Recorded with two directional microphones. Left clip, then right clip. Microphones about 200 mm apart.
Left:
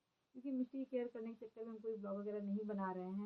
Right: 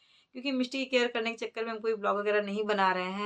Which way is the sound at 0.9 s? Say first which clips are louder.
Right 18 dB; 15° right (ahead or behind).